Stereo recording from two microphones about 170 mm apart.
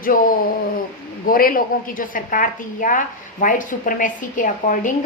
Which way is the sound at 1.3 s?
55° left (ahead or behind).